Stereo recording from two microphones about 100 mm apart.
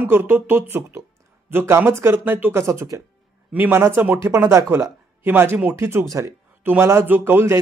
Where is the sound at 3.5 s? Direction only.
20° right (ahead or behind).